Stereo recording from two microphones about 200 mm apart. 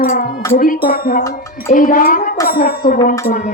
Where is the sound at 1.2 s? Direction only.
15° left (ahead or behind).